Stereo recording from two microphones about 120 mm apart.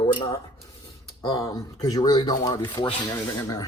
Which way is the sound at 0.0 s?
40° left (ahead or behind).